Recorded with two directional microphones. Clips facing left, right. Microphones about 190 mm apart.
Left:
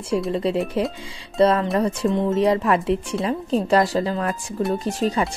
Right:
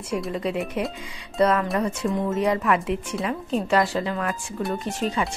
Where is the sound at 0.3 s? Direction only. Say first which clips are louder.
Left 4 dB; 30° left (ahead or behind).